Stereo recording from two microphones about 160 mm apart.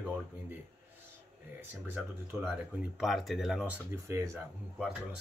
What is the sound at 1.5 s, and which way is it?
Speech, 15° right (ahead or behind).